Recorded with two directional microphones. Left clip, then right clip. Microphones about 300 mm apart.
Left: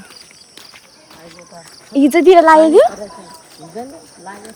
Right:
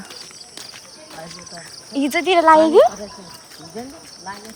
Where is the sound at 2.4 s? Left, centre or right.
Left.